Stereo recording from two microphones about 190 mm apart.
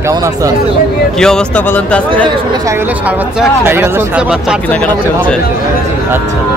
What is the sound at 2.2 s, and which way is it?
Speech, 15° right (ahead or behind).